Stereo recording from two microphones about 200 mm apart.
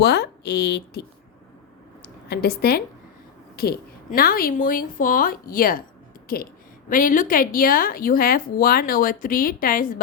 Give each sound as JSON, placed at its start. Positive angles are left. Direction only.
{"t": 0.0, "sound": "a woman's voice", "side_deg": 55}